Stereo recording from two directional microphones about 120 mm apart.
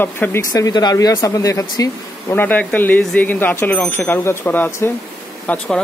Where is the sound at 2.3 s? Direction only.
15° left (ahead or behind).